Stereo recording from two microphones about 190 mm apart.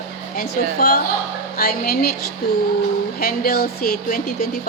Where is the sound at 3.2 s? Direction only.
55° left (ahead or behind).